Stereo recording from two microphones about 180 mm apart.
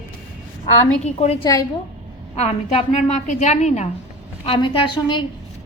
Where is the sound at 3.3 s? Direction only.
40° left (ahead or behind).